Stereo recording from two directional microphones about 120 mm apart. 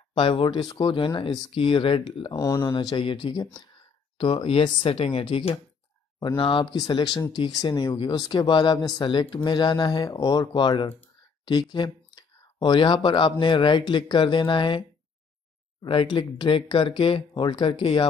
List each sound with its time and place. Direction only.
0.1 s speech: 45° left (ahead or behind)
2.3 s speech: 25° left (ahead or behind)
2.6 s speech: 40° left (ahead or behind)
15.8 s speech: 45° left (ahead or behind)